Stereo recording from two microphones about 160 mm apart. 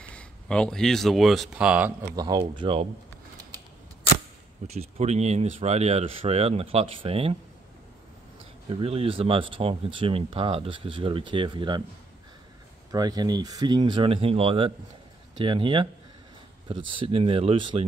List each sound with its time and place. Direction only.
0.0 s speech: 5° left (ahead or behind)
2.1 s speech: 25° right (ahead or behind)
4.6 s speech: 40° right (ahead or behind)
8.6 s speech: 35° right (ahead or behind)
12.9 s speech: 25° right (ahead or behind)